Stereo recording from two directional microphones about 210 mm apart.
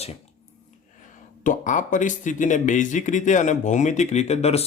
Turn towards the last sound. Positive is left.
turn(degrees=30)  # may be behind; listen again after turning